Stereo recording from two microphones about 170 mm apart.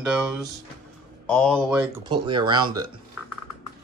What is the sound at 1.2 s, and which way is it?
Speech, 5° left (ahead or behind).